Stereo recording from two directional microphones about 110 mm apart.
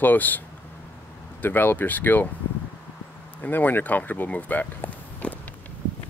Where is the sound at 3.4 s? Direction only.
15° left (ahead or behind).